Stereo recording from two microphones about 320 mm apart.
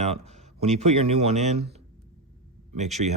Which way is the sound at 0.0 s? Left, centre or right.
Centre.